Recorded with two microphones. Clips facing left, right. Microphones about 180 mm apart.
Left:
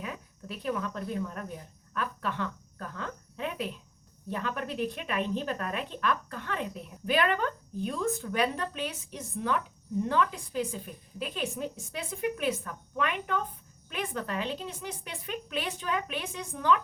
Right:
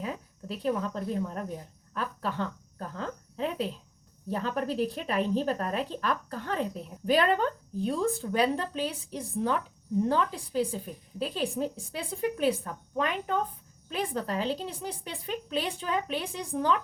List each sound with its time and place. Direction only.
0.0 s speech: 30° right (ahead or behind)